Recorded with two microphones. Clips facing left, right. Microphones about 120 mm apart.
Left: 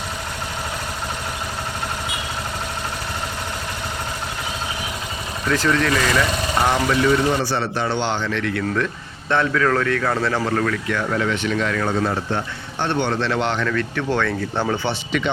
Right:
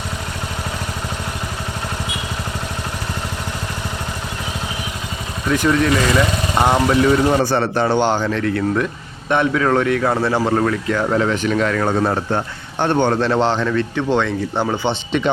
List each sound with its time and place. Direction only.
5.5 s speech: 20° right (ahead or behind)
7.4 s a man's voice: 50° right (ahead or behind); by 8.8 s 35° right (ahead or behind)
9.3 s speech: 20° right (ahead or behind)